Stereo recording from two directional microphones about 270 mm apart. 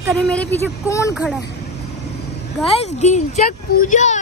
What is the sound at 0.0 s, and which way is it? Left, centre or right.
Speech, centre.